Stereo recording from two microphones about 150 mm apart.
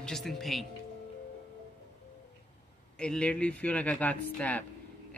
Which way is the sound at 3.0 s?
5° left (ahead or behind).